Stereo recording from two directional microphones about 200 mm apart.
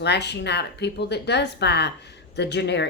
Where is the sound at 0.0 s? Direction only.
55° left (ahead or behind).